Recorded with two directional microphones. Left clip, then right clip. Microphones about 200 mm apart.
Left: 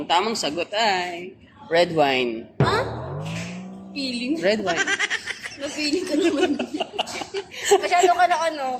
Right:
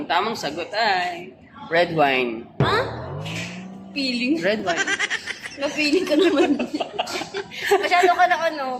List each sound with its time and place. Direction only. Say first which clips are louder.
0.1 s speech: left 1 dB; 40° left (ahead or behind)
1.7 s a man's voice: even; 30° left (ahead or behind)
2.6 s music: even; centre (ahead or behind)
3.9 s a woman's voice: right 4 dB; 5° left (ahead or behind)
4.4 s a man's voice: left 5 dB; 35° left (ahead or behind)
4.6 s speech: even; centre (ahead or behind)
6.4 s a woman's voice: right 2 dB; 45° left (ahead or behind)